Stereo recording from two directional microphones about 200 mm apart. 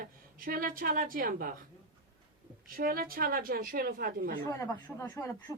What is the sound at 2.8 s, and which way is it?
A woman's voice, 45° right (ahead or behind).